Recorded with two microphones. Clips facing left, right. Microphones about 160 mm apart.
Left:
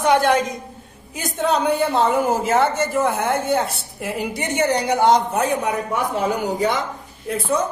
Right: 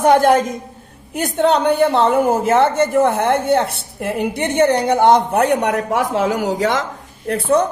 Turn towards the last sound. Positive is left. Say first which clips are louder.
# right 6 dB
turn(degrees=-65)  # may be behind; listen again after turning